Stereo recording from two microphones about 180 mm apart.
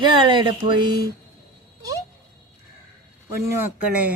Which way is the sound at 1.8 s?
20° right (ahead or behind).